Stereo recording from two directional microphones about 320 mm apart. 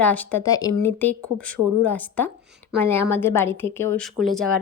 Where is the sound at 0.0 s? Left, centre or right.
Centre.